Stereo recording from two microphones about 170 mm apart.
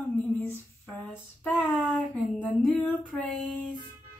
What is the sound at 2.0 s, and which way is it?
Female singing, 5° left (ahead or behind).